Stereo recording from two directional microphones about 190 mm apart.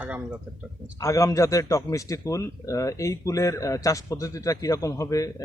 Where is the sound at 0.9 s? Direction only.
15° left (ahead or behind).